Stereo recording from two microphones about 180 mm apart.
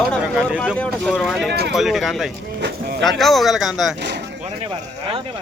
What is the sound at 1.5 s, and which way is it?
Speech, 65° right (ahead or behind).